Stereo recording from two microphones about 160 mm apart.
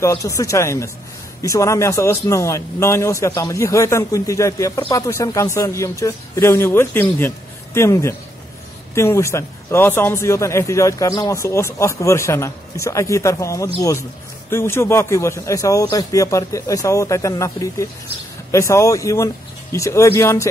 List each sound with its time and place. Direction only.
0.0 s a man's voice: 20° left (ahead or behind)